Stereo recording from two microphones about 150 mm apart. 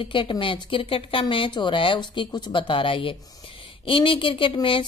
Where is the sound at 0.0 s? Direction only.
35° left (ahead or behind).